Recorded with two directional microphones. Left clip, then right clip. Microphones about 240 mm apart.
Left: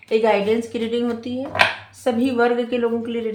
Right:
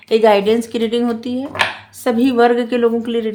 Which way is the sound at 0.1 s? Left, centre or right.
Right.